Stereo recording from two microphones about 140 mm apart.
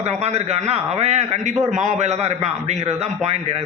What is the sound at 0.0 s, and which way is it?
Speech, 50° right (ahead or behind).